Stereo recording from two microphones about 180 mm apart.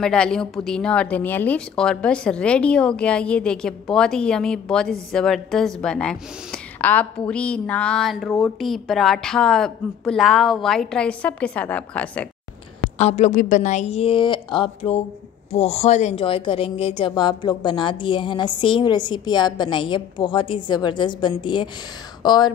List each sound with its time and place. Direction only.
0.0 s a woman's voice: 5° left (ahead or behind)
12.9 s a woman's voice: 35° left (ahead or behind)